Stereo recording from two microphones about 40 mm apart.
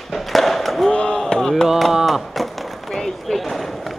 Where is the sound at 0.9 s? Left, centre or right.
Left.